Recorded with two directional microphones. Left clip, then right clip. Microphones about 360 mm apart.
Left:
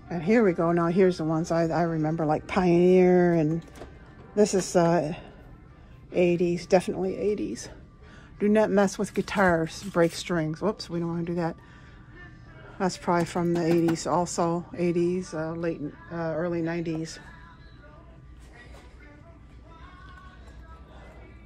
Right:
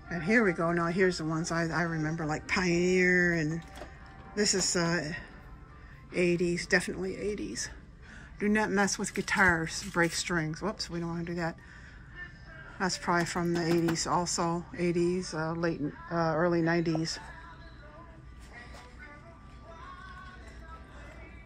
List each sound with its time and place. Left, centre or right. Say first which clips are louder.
0.1 s speech: left 4 dB; centre
3.1 s a woman's voice: left 4 dB; left
3.3 s speech: left 7 dB; centre
4.6 s a woman's voice: left 7 dB; left
6.1 s speech: left 5 dB; centre
12.7 s speech: left 3 dB; centre